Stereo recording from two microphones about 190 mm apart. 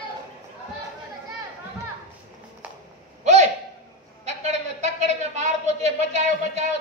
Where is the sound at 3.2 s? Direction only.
35° right (ahead or behind).